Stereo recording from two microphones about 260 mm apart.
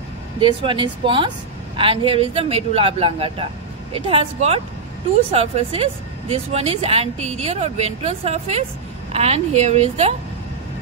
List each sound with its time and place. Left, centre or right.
0.4 s speech: centre